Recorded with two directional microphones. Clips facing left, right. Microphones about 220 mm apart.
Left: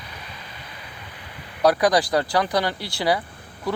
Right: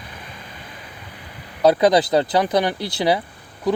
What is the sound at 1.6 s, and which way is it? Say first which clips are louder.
Speech: right 3 dB; 25° right (ahead or behind).